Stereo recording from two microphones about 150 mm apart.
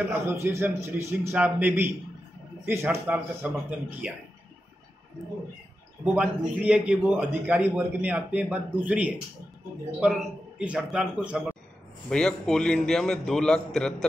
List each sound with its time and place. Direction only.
0.3 s a man's voice: 15° right (ahead or behind)
6.1 s a man's voice: 5° right (ahead or behind)
12.1 s a man's voice: 5° left (ahead or behind)